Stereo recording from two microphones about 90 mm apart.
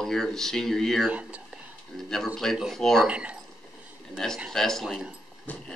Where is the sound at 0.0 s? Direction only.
5° left (ahead or behind).